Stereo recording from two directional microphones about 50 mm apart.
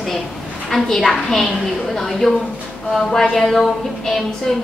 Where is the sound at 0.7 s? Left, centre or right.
Centre.